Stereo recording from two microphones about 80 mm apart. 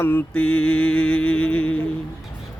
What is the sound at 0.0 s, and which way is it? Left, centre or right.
Mantra, left.